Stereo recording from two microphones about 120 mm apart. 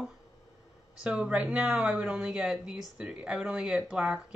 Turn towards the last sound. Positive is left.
turn(degrees=-5)  # may be behind; listen again after turning